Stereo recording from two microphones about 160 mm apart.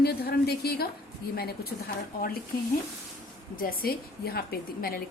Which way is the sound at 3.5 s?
65° left (ahead or behind).